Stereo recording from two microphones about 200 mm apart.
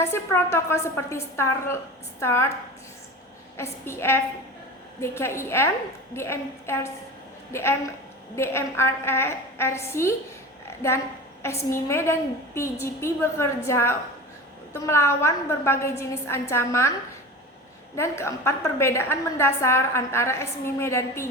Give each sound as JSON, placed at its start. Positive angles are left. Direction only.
{"t": 0.0, "sound": "a woman's voice", "side_deg": 10}
{"t": 3.6, "sound": "a woman's voice", "side_deg": 15}
{"t": 11.4, "sound": "a woman's voice", "side_deg": 15}
{"t": 17.9, "sound": "a woman's voice", "side_deg": 15}